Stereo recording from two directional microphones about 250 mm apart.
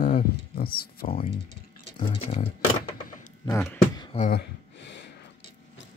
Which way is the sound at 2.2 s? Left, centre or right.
Left.